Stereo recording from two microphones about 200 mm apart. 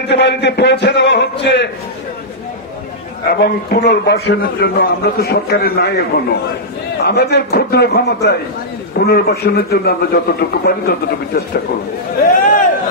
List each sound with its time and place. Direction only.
0.1 s a man's voice: 60° left (ahead or behind)
3.3 s a man's voice: 50° left (ahead or behind)